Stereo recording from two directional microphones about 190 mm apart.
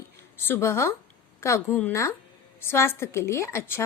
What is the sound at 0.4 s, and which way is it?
A woman's voice, 15° left (ahead or behind).